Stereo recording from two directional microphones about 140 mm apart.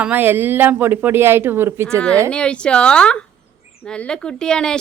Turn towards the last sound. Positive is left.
turn(degrees=5)  # may be behind; listen again after turning